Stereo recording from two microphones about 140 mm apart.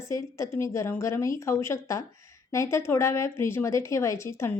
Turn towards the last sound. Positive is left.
turn(degrees=20)  # may be behind; listen again after turning